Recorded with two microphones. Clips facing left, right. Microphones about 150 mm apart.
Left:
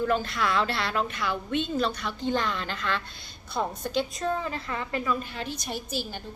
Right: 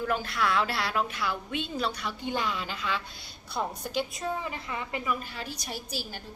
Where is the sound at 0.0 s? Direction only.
10° right (ahead or behind).